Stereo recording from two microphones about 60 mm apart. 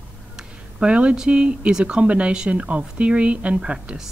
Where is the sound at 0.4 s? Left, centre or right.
Centre.